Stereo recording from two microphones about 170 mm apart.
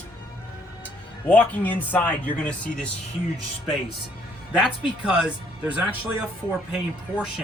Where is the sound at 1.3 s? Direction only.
10° left (ahead or behind).